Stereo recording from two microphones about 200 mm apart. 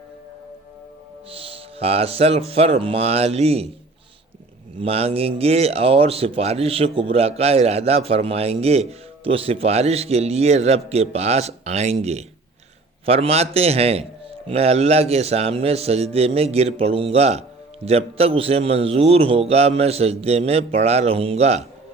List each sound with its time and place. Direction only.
1.3 s speech: 30° right (ahead or behind)
4.8 s speech: 30° right (ahead or behind)